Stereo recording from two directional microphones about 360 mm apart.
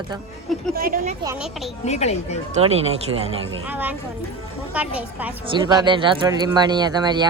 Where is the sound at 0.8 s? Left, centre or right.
Right.